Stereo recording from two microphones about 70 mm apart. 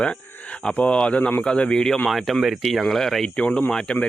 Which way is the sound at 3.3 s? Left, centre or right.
Centre.